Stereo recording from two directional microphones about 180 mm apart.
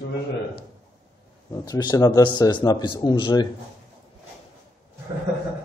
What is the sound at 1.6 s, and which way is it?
A man's voice, 20° left (ahead or behind).